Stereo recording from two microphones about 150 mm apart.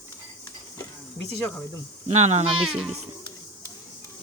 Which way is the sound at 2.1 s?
50° right (ahead or behind).